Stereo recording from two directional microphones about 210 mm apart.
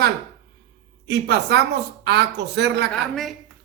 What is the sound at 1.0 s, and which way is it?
A woman's voice, 55° right (ahead or behind).